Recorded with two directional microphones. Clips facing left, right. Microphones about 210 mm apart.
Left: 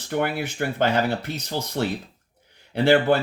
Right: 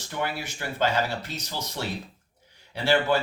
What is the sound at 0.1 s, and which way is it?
Speech, 55° left (ahead or behind).